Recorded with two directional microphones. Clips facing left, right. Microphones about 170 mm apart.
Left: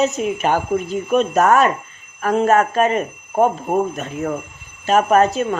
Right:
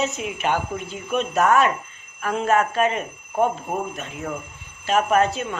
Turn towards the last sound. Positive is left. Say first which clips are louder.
# left 5 dB
turn(degrees=40)  # may be behind; listen again after turning